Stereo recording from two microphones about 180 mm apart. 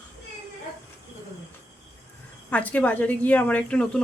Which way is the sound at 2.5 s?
5° left (ahead or behind).